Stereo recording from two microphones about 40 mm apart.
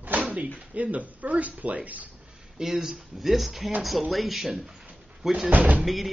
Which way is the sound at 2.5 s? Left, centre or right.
Centre.